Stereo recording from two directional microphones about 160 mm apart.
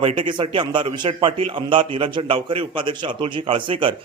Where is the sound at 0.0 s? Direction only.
35° right (ahead or behind).